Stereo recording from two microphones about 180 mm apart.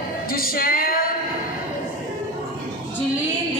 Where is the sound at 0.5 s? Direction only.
55° left (ahead or behind).